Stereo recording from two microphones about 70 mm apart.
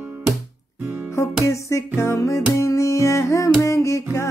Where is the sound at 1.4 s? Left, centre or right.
Left.